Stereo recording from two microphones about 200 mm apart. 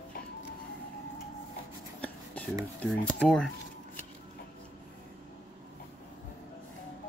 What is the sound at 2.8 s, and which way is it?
Speech, 5° left (ahead or behind).